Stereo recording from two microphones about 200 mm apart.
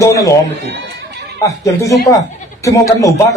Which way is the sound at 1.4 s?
15° left (ahead or behind).